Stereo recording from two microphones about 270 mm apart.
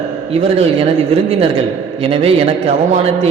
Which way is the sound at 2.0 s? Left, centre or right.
Right.